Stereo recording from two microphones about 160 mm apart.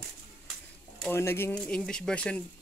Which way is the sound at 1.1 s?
15° left (ahead or behind).